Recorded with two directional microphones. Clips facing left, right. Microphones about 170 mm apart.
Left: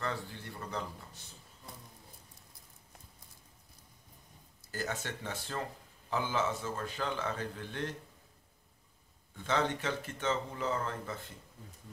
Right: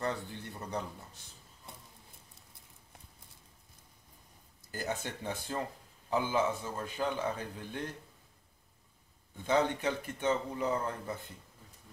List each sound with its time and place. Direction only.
0.0 s a sound: 20° right (ahead or behind)
4.6 s a man's voice: 15° right (ahead or behind)
9.4 s a man's voice: 15° right (ahead or behind)